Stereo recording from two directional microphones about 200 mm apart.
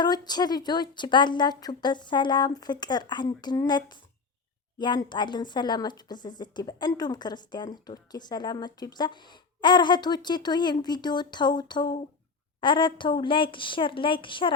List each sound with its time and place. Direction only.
0.0 s speech: 20° left (ahead or behind)